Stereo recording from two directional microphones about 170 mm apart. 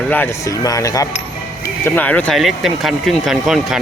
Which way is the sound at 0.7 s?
20° left (ahead or behind).